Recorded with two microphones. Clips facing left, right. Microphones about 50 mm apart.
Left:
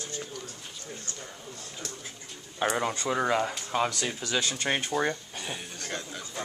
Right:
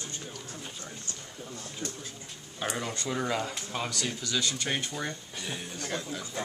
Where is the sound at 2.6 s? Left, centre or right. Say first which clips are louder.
Left 6 dB; centre.